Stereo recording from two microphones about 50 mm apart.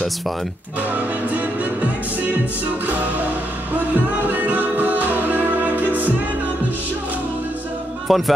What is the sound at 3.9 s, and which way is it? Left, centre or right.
Music, right.